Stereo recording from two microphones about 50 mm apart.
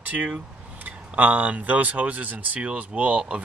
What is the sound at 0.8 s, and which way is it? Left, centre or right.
Speech, right.